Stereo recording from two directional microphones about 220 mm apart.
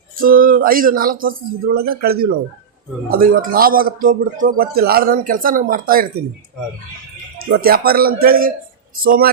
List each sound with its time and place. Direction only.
0.2 s a man's voice: 40° right (ahead or behind)
7.3 s a man's voice: 45° right (ahead or behind)